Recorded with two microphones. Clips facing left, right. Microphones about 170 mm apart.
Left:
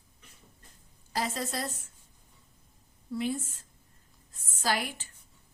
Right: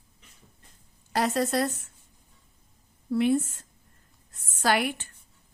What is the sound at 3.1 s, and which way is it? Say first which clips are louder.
A woman's voice: right 9 dB; 65° right (ahead or behind).